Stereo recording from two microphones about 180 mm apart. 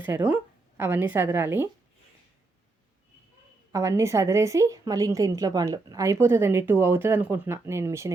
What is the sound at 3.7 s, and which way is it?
Speech, 15° right (ahead or behind).